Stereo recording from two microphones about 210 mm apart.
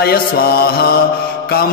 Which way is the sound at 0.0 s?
45° left (ahead or behind).